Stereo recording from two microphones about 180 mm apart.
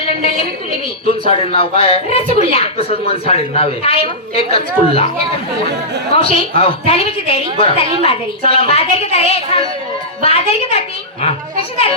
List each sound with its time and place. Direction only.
0.0 s a sound: 30° left (ahead or behind)
1.2 s speech: 30° left (ahead or behind)
6.1 s speech: 30° left (ahead or behind)